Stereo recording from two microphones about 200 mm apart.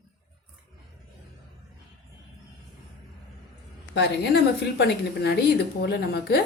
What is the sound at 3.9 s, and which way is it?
Speech, 55° left (ahead or behind).